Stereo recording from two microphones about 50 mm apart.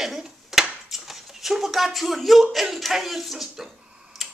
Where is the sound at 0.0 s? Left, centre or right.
Centre.